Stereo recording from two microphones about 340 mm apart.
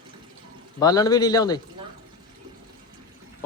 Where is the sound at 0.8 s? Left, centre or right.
Centre.